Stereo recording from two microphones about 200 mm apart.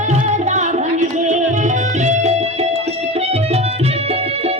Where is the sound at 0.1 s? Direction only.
35° right (ahead or behind).